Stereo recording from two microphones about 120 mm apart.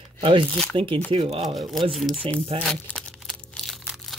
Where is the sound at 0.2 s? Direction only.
45° right (ahead or behind).